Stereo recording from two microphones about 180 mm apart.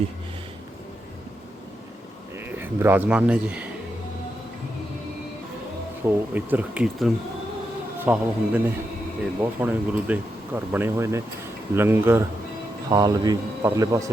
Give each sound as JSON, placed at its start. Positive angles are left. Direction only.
{"t": 2.5, "sound": "speech", "side_deg": -10}
{"t": 6.1, "sound": "speech", "side_deg": -10}